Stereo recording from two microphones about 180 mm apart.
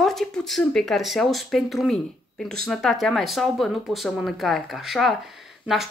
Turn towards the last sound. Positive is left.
turn(degrees=0)  # may be behind; listen again after turning